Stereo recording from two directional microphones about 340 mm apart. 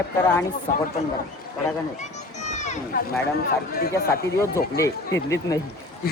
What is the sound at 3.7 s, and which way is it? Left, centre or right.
Speech, left.